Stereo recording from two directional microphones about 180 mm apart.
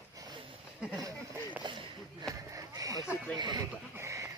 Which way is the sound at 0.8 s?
5° right (ahead or behind).